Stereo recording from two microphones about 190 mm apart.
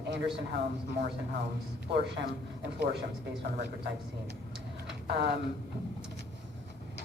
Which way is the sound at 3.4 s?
60° right (ahead or behind).